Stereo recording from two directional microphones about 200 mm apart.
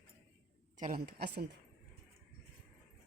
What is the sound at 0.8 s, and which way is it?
Speech, 45° right (ahead or behind).